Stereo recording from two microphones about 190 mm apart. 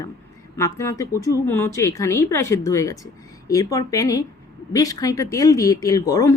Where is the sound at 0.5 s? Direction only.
15° left (ahead or behind).